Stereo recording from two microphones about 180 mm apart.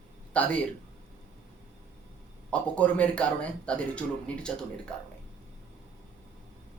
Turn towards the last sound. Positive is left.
turn(degrees=5)  # may be behind; listen again after turning